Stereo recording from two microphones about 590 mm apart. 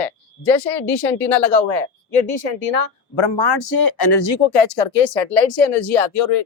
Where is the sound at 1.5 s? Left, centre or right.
Left.